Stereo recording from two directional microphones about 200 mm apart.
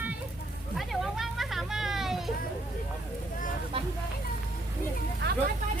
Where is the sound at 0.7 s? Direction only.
Centre (ahead or behind).